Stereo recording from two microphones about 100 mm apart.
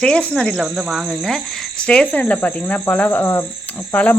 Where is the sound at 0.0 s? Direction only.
10° left (ahead or behind).